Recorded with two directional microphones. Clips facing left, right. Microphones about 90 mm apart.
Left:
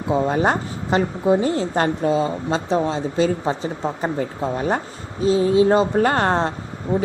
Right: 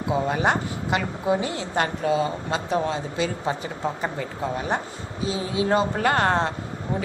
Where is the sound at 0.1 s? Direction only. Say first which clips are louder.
Left 4 dB; 35° left (ahead or behind).